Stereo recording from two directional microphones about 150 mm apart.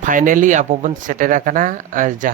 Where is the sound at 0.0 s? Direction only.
65° right (ahead or behind).